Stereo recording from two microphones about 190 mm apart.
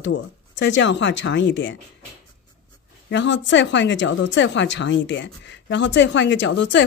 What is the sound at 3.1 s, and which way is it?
Speech, 70° left (ahead or behind).